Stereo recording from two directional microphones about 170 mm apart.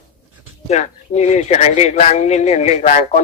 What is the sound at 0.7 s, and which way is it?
Speech, 40° left (ahead or behind).